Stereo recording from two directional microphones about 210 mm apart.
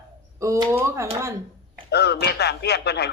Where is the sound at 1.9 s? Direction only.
50° left (ahead or behind).